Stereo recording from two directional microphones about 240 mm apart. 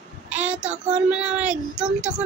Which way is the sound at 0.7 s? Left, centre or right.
Right.